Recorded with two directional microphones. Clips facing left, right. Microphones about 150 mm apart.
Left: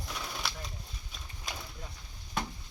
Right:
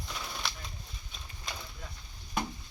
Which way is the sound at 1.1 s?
5° left (ahead or behind).